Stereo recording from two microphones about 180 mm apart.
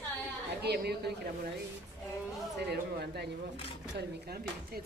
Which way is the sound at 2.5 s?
65° right (ahead or behind).